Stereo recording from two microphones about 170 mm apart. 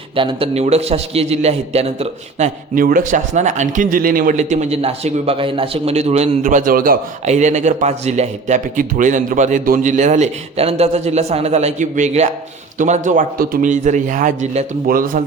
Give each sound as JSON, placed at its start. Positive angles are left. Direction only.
{"t": 0.2, "sound": "a man's voice", "side_deg": -30}
{"t": 2.7, "sound": "a man's voice", "side_deg": -55}
{"t": 7.3, "sound": "a man's voice", "side_deg": -45}